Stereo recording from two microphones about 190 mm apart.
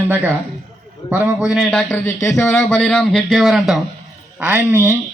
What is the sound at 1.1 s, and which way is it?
A man's voice, 10° right (ahead or behind).